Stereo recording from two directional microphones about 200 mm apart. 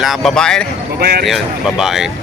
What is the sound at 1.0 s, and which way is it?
Speech, 50° right (ahead or behind).